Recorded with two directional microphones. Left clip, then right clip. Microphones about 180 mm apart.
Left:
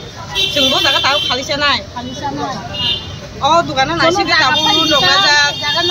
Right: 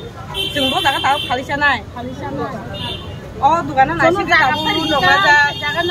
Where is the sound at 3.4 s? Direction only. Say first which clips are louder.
Left 1 dB; 10° right (ahead or behind).